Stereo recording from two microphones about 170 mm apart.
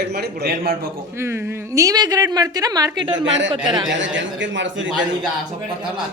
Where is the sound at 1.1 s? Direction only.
15° right (ahead or behind).